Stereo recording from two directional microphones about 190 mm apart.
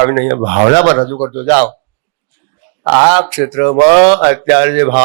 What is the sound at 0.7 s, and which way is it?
Speech, 15° left (ahead or behind).